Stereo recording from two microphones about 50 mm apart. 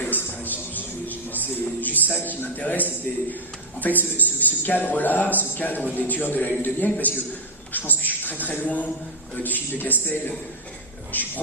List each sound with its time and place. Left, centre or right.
0.0 s music: left
1.8 s a man's voice: left